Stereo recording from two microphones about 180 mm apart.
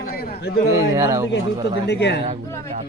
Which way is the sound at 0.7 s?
15° right (ahead or behind).